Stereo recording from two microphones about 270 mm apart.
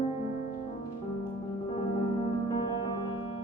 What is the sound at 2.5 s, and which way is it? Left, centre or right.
Music, centre.